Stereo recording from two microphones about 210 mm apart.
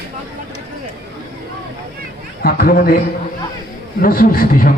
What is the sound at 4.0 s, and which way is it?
Speech, 45° left (ahead or behind).